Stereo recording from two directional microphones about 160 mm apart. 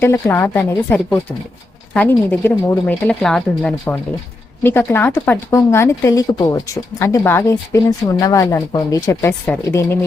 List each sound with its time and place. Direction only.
0.0 s a woman's voice: 15° left (ahead or behind)